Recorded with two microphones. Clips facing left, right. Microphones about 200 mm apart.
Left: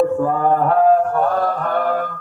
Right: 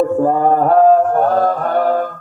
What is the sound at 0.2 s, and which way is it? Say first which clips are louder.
Mantra: right 4 dB; 40° right (ahead or behind).